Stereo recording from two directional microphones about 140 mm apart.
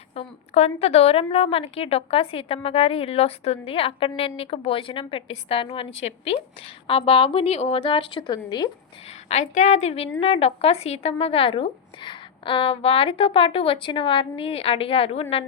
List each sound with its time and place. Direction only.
0.1 s a woman's voice: 50° left (ahead or behind); by 8.7 s 30° left (ahead or behind)
9.0 s a woman's voice: 55° left (ahead or behind)